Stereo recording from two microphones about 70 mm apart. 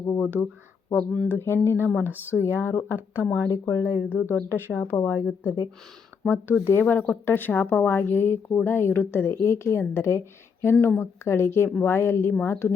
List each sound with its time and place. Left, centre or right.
0.9 s speech: centre
1.4 s speech: left
3.5 s speech: left
4.1 s speech: left
5.1 s speech: centre
6.2 s speech: left